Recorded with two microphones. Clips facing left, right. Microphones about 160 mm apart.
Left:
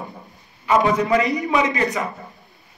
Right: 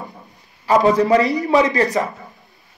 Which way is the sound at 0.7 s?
35° right (ahead or behind).